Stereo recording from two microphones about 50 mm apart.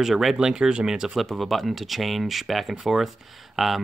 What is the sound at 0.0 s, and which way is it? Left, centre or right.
Speech, centre.